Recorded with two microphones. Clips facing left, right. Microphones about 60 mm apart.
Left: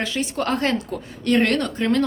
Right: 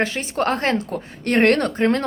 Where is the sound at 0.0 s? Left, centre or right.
Right.